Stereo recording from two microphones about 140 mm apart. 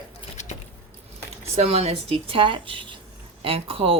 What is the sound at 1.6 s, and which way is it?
Speech, 45° right (ahead or behind).